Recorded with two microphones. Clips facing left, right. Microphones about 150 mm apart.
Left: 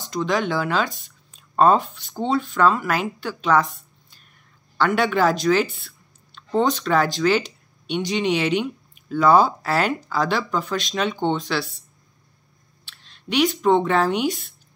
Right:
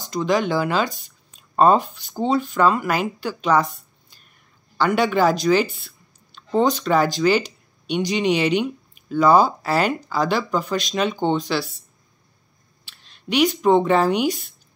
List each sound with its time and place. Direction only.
0.1 s speech: centre (ahead or behind)
12.8 s speech: 5° right (ahead or behind)